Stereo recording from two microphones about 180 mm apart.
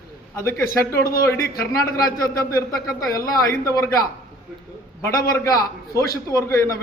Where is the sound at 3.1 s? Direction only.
20° left (ahead or behind).